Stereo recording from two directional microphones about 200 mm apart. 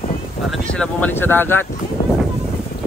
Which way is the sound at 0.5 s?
5° left (ahead or behind).